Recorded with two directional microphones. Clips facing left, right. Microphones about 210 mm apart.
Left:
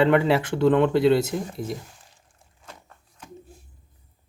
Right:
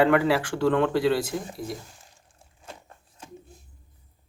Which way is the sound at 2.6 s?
30° right (ahead or behind).